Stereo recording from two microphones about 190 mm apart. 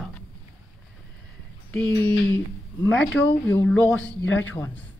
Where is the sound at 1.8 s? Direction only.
20° right (ahead or behind).